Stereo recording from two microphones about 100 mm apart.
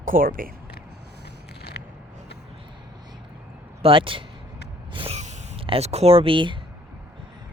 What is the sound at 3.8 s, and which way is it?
Speech, 60° right (ahead or behind).